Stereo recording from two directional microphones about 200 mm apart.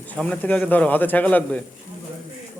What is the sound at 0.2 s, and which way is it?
A man's voice, 5° left (ahead or behind).